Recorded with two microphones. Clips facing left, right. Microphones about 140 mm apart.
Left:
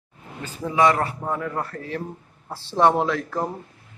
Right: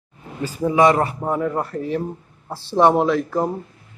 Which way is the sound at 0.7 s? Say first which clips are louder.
Right 4 dB; 20° right (ahead or behind).